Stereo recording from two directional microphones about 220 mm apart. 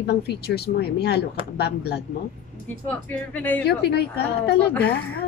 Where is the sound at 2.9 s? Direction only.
5° left (ahead or behind).